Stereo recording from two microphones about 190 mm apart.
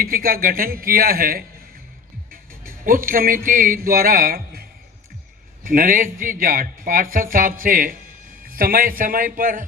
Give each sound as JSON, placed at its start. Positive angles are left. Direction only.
{"t": 0.0, "sound": "a man's voice", "side_deg": -50}
{"t": 2.6, "sound": "a man's voice", "side_deg": -50}
{"t": 5.6, "sound": "a man's voice", "side_deg": -45}